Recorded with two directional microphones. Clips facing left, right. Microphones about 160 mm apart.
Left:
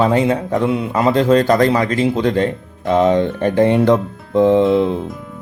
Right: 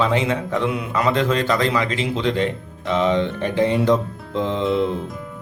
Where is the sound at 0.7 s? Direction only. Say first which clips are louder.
Left 5 dB; 30° left (ahead or behind); by 4.9 s 55° left (ahead or behind).